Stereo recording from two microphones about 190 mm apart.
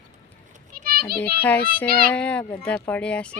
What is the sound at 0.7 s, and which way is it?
Children playing, 50° right (ahead or behind).